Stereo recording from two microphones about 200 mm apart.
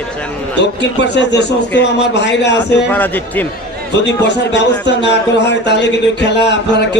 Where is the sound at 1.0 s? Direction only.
60° left (ahead or behind).